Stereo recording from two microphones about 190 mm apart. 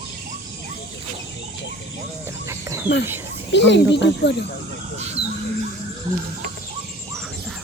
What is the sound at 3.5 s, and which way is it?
Speech, 70° left (ahead or behind).